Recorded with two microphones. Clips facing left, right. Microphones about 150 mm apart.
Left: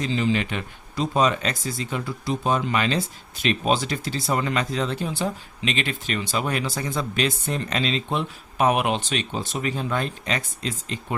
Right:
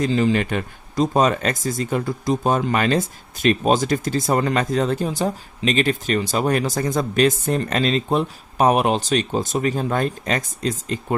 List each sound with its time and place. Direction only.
0.0 s speech: 50° right (ahead or behind)